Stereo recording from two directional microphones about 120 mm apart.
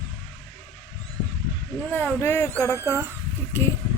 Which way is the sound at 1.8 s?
15° left (ahead or behind).